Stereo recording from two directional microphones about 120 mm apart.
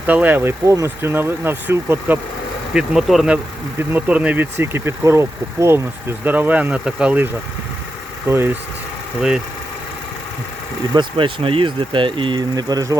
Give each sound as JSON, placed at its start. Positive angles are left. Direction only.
{"t": 0.0, "sound": "speech", "side_deg": -15}
{"t": 0.6, "sound": "speech", "side_deg": -25}
{"t": 2.7, "sound": "speech", "side_deg": -5}
{"t": 3.3, "sound": "speech", "side_deg": -15}
{"t": 8.3, "sound": "speech", "side_deg": -20}
{"t": 10.9, "sound": "speech", "side_deg": -45}